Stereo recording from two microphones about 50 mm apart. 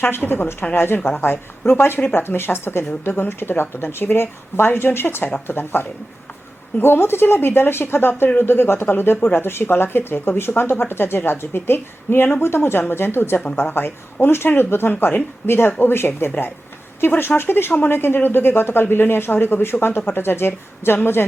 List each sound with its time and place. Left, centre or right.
0.2 s speech: left